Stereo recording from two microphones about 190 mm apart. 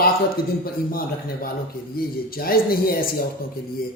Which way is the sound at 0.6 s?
50° left (ahead or behind).